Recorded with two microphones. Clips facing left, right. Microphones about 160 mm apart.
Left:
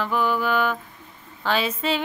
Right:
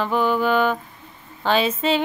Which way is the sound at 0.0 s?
25° right (ahead or behind).